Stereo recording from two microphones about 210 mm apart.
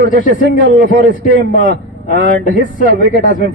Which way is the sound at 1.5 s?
40° left (ahead or behind).